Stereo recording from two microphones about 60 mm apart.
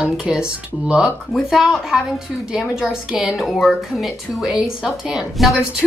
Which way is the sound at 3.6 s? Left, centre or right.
Centre.